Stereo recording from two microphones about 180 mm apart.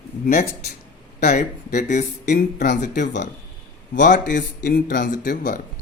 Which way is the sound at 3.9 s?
45° left (ahead or behind).